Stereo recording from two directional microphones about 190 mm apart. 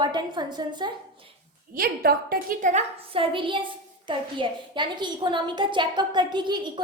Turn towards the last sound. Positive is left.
turn(degrees=-25)  # may be behind; listen again after turning